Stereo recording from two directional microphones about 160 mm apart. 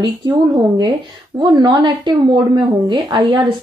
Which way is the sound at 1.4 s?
25° right (ahead or behind).